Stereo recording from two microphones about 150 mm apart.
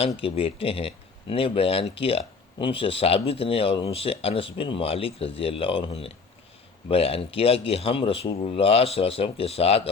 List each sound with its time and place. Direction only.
0.2 s speech: 40° left (ahead or behind)